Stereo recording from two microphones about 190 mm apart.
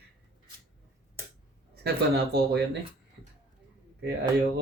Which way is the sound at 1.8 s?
60° right (ahead or behind).